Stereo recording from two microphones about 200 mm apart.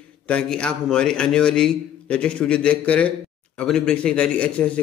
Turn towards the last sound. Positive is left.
turn(degrees=5)  # may be behind; listen again after turning